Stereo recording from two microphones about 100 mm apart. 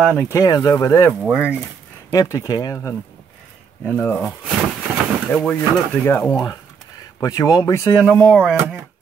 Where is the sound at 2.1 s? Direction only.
35° left (ahead or behind).